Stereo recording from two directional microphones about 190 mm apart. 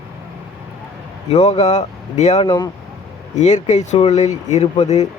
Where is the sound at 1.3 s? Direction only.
35° left (ahead or behind).